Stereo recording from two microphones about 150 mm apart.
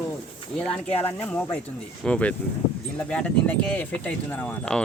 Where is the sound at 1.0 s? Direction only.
15° left (ahead or behind).